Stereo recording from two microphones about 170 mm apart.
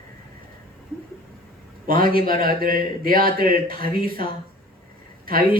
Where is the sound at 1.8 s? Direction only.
60° right (ahead or behind).